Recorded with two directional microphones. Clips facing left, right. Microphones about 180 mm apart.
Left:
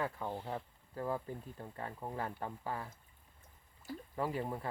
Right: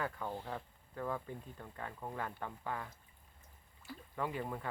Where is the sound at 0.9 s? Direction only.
30° left (ahead or behind).